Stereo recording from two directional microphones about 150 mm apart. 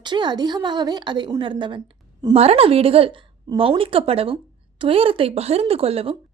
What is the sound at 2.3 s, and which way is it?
A woman's voice, 45° right (ahead or behind).